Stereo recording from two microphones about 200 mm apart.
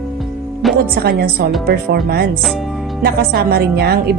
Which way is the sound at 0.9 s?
50° right (ahead or behind).